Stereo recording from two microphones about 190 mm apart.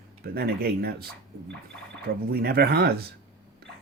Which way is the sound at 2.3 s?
55° right (ahead or behind).